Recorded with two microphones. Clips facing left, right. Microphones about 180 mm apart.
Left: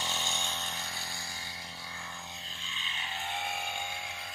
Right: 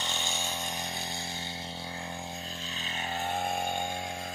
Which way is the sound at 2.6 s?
40° right (ahead or behind).